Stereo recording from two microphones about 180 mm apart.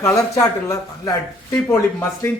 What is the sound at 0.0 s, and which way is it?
Speech, 15° left (ahead or behind).